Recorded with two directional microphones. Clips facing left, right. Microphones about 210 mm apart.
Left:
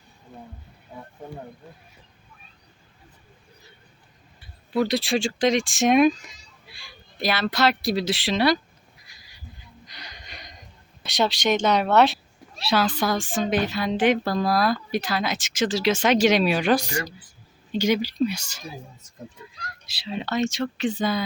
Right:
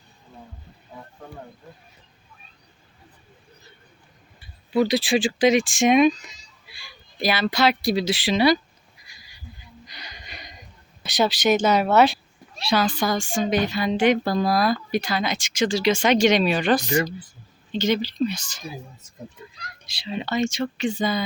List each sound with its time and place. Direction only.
4.7 s a woman's voice: centre (ahead or behind)
6.2 s a sound: 55° left (ahead or behind)
7.2 s a woman's voice: centre (ahead or behind)
9.0 s a sound: centre (ahead or behind)
11.0 s a woman's voice: centre (ahead or behind)
19.9 s a woman's voice: centre (ahead or behind)